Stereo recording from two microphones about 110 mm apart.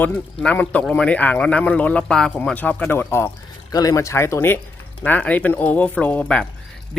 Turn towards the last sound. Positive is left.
turn(degrees=10)  # may be behind; listen again after turning